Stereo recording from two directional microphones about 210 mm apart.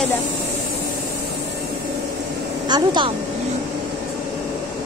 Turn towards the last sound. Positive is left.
turn(degrees=-20)  # may be behind; listen again after turning